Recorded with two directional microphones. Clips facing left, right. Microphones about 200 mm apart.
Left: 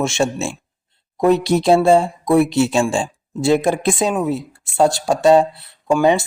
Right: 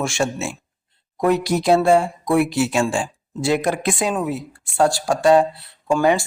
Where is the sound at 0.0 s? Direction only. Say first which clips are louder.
Left 3 dB; 25° left (ahead or behind).